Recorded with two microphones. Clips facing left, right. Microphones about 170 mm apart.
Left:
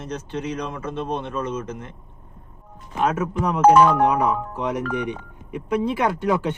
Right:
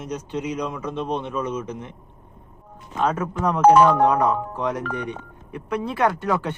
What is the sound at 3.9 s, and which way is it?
Speech, 10° left (ahead or behind).